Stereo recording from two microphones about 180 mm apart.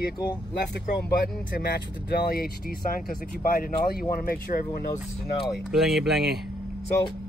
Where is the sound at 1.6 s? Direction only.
60° left (ahead or behind).